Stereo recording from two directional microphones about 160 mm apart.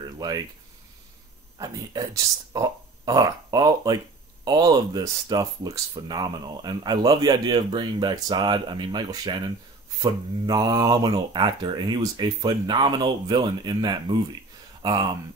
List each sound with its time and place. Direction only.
1.6 s speech: 20° right (ahead or behind)
10.4 s speech: 25° right (ahead or behind)